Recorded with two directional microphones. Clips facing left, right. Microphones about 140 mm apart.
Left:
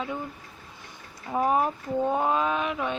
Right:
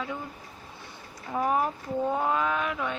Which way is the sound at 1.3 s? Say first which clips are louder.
Left 2 dB; 20° left (ahead or behind).